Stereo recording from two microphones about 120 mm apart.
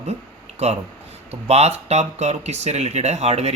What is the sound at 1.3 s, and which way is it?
Speech, 60° right (ahead or behind).